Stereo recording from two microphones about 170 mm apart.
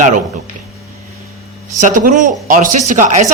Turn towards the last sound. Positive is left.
turn(degrees=-50)  # may be behind; listen again after turning